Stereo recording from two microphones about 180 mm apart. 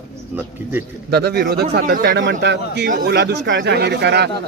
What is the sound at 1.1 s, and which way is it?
A man's voice, 65° right (ahead or behind).